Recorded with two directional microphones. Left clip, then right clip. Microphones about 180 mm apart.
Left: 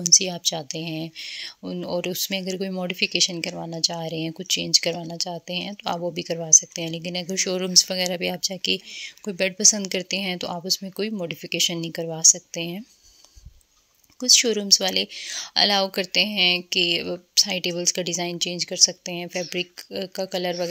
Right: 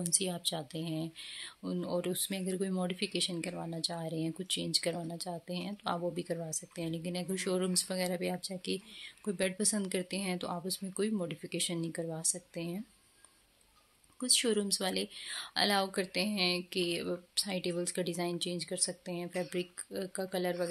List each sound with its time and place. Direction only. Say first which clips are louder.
0.0 s speech: left 16 dB; 35° left (ahead or behind)
14.2 s speech: left 12 dB; 35° left (ahead or behind)